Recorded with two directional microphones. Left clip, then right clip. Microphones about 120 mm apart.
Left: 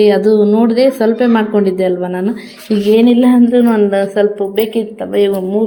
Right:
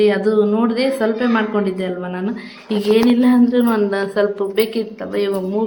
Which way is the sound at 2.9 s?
20° left (ahead or behind).